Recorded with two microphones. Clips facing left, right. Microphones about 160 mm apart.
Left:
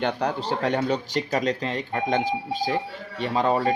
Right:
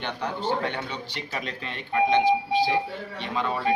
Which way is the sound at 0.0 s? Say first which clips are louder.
Left 4 dB; 40° left (ahead or behind).